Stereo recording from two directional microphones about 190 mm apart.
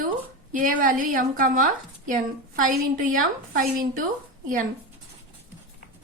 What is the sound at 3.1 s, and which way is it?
Speech, 45° right (ahead or behind).